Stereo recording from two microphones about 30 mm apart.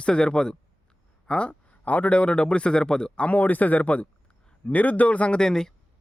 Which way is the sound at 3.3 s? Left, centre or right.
Left.